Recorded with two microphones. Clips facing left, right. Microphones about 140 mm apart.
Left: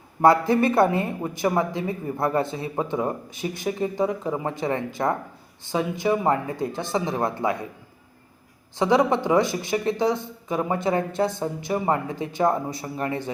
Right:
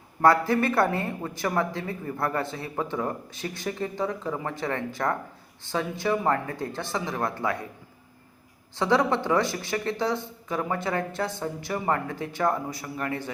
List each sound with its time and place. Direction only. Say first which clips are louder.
0.2 s speech: left 3 dB; 20° left (ahead or behind)
8.7 s speech: left 3 dB; 15° left (ahead or behind)